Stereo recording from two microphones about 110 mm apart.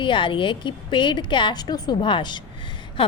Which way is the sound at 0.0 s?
50° left (ahead or behind).